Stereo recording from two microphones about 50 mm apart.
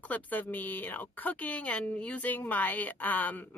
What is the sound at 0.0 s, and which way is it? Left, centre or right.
Speech, left.